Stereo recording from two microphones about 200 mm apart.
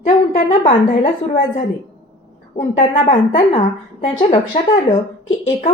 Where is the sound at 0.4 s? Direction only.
25° left (ahead or behind).